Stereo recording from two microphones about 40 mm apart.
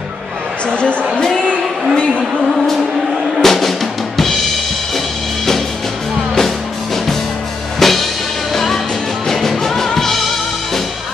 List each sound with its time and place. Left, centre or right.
0.7 s a sound: left
2.5 s music: centre
7.8 s music: centre
9.9 s drum kit: centre